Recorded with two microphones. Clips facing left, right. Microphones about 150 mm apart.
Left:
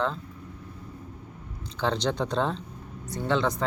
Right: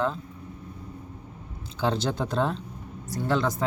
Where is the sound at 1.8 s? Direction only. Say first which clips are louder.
Even; 10° right (ahead or behind).